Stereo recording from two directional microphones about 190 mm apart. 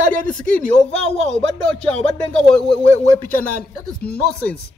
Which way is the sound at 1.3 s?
5° left (ahead or behind).